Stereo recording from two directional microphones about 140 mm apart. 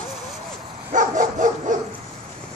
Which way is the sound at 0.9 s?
65° right (ahead or behind).